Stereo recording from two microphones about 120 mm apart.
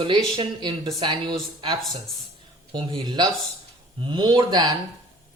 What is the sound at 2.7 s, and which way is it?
A woman's voice, 40° right (ahead or behind).